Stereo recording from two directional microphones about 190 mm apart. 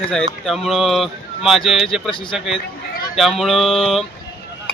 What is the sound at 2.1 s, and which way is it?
Speech, 25° left (ahead or behind).